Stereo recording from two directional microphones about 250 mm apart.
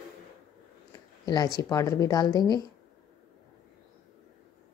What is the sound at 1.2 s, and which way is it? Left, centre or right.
Speech, centre.